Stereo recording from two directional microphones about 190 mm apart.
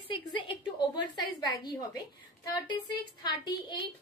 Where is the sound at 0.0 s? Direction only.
25° left (ahead or behind).